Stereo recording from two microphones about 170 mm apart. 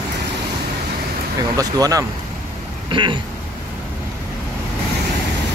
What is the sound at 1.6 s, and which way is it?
Speech, 20° right (ahead or behind).